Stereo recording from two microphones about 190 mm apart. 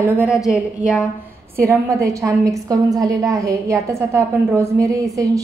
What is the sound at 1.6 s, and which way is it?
A woman's voice, 15° right (ahead or behind).